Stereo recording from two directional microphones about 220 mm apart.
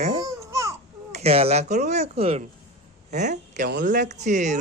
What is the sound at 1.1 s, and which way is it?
Speech, 25° right (ahead or behind).